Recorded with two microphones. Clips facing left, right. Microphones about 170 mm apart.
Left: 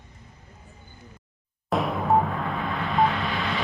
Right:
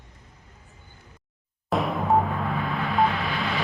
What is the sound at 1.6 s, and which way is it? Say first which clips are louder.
Music: even; centre (ahead or behind).